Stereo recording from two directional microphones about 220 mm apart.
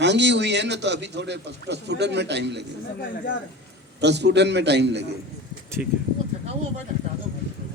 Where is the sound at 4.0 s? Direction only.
50° right (ahead or behind).